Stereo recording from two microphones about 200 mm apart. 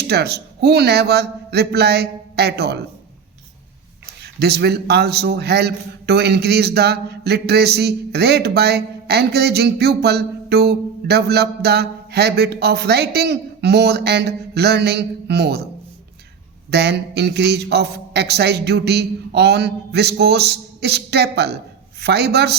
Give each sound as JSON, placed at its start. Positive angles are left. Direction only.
{"t": 0.1, "sound": "a man's voice", "side_deg": -55}
{"t": 4.2, "sound": "a man's voice", "side_deg": -55}
{"t": 16.7, "sound": "a man's voice", "side_deg": -55}